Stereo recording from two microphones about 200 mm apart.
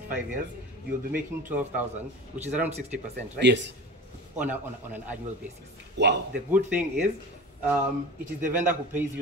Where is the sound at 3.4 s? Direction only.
60° right (ahead or behind).